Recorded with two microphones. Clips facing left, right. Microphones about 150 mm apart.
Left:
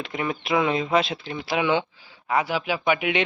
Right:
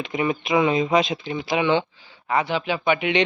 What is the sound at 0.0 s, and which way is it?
Speech, centre (ahead or behind).